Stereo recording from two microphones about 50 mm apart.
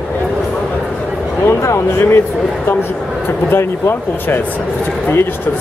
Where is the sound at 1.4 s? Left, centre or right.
Left.